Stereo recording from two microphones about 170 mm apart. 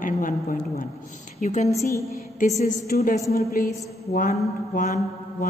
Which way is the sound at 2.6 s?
55° left (ahead or behind).